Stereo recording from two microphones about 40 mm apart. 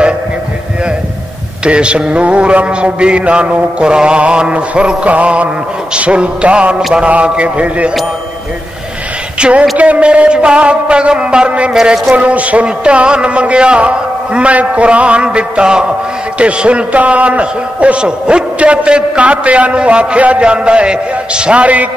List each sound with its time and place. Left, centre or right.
1.6 s mantra: right
5.9 s a man's voice: right
9.4 s a man's voice: right
9.8 s mantra: right
11.7 s a man's voice: centre
12.2 s a man's voice: right
12.6 s mantra: right
16.3 s a man's voice: right